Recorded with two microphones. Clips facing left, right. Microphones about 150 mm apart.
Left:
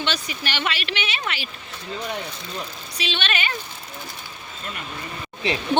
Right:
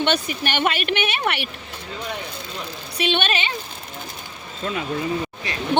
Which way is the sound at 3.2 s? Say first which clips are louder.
Right 2 dB; 30° right (ahead or behind).